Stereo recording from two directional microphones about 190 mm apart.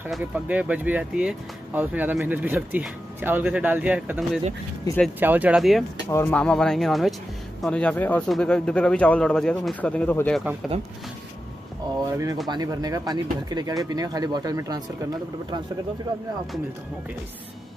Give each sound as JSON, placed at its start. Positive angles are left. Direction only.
{"t": 0.1, "sound": "speech", "side_deg": -5}
{"t": 6.0, "sound": "speech", "side_deg": 10}
{"t": 12.0, "sound": "speech", "side_deg": -20}